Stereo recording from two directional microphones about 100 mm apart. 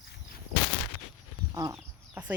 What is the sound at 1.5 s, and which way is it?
Livestock, 35° right (ahead or behind).